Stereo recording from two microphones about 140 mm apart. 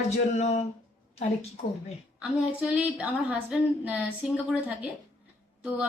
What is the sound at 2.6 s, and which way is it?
Speech, 10° right (ahead or behind).